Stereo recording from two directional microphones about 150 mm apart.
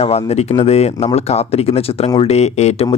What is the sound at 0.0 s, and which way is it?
Speech, 45° left (ahead or behind).